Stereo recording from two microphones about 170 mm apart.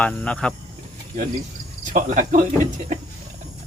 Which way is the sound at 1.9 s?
50° right (ahead or behind).